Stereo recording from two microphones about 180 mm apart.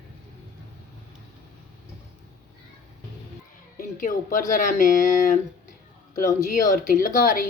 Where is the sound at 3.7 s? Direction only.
50° left (ahead or behind).